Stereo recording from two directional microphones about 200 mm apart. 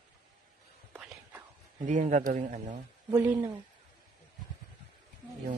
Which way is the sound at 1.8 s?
40° right (ahead or behind).